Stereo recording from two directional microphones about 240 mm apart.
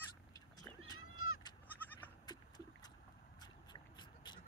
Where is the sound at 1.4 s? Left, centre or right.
Centre.